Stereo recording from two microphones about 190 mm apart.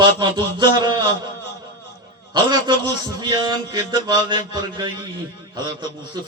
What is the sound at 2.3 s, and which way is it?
A man's voice, 25° right (ahead or behind).